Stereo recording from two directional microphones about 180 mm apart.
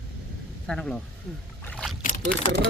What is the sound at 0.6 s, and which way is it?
Speech, 5° left (ahead or behind).